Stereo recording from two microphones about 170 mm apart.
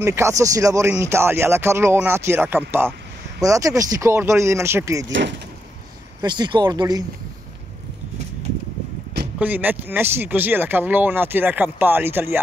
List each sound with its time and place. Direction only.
0.0 s speech: 15° right (ahead or behind)
6.2 s speech: 25° right (ahead or behind)
9.4 s speech: 10° right (ahead or behind)